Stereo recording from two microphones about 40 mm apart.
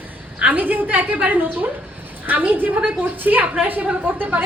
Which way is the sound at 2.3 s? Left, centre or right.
Right.